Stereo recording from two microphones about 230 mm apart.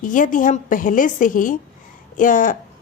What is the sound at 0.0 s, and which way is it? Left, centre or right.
Speech, left.